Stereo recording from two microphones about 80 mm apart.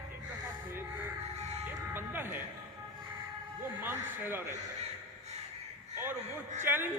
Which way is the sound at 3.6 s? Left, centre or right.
Right.